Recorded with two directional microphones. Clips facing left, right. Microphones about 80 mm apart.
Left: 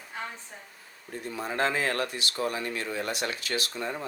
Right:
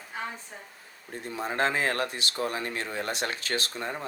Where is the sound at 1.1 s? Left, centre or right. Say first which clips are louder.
Right 1 dB; right.